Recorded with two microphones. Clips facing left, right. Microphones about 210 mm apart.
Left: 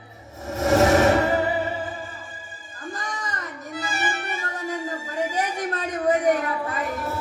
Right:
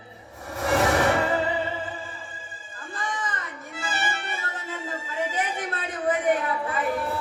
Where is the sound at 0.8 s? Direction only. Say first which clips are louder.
Left 5 dB; 25° left (ahead or behind).